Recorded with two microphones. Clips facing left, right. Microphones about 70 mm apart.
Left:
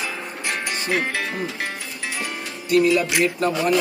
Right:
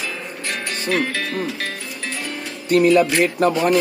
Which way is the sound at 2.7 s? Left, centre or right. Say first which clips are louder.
Right 3 dB; right.